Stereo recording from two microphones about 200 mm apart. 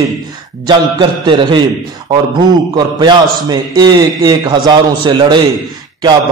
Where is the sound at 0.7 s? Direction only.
20° right (ahead or behind).